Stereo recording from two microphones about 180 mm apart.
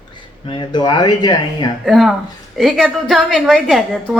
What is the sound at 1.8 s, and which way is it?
A woman's voice, centre (ahead or behind).